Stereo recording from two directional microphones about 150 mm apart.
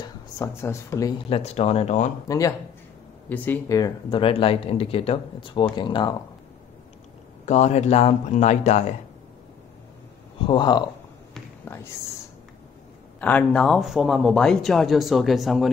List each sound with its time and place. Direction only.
0.0 s speech: 20° left (ahead or behind)
1.3 s speech: 45° left (ahead or behind)
2.2 s speech: 20° left (ahead or behind)
3.3 s speech: 10° left (ahead or behind)
3.7 s speech: 25° left (ahead or behind)
4.2 s speech: 35° left (ahead or behind)
7.4 s speech: 50° left (ahead or behind)
10.4 s speech: 30° left (ahead or behind)
11.6 s a sound: 15° left (ahead or behind)
13.2 s speech: 10° left (ahead or behind)